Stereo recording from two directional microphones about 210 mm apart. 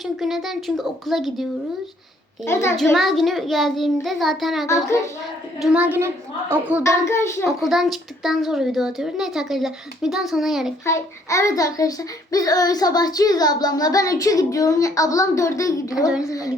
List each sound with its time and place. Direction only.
0.0 s a woman's voice: centre (ahead or behind)
2.4 s a child's voice: 10° left (ahead or behind)
2.9 s a woman's voice: centre (ahead or behind)
6.8 s a child's voice: 15° left (ahead or behind)
7.6 s a woman's voice: centre (ahead or behind)
10.8 s a child's voice: 15° left (ahead or behind)
16.0 s a woman's voice: centre (ahead or behind)
16.2 s a child's voice: 15° left (ahead or behind)